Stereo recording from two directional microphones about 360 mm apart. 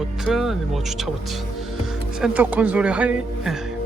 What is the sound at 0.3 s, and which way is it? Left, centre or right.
Speech, centre.